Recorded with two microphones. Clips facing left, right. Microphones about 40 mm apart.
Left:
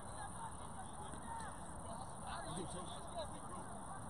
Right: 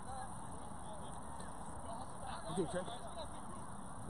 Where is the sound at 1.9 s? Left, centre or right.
Centre.